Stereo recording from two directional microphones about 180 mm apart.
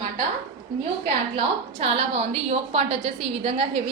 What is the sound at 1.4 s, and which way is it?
A woman's voice, 35° right (ahead or behind).